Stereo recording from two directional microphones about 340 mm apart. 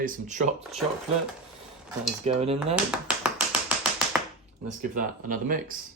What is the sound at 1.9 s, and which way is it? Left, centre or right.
Cutlery, centre.